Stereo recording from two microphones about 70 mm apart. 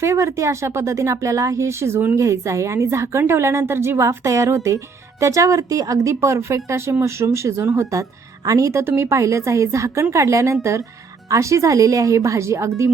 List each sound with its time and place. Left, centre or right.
0.0 s a woman's voice: right
2.1 s a woman's voice: right
8.8 s a woman's voice: right